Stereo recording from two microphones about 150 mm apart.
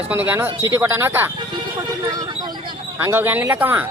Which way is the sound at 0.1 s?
10° right (ahead or behind).